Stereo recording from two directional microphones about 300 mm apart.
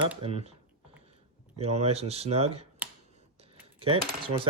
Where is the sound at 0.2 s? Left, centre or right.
Centre.